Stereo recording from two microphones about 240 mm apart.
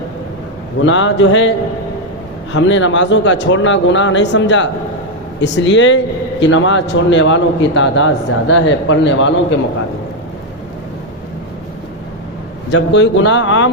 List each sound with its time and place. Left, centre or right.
0.9 s a man's voice: left
12.7 s a man's voice: left